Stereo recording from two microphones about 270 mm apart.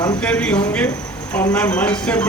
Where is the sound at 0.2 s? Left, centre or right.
Centre.